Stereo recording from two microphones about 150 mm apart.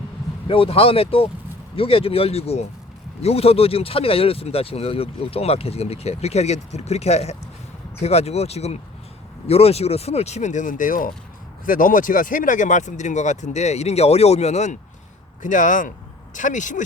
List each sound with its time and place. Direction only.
0.4 s speech: 35° left (ahead or behind); by 16.8 s 55° left (ahead or behind)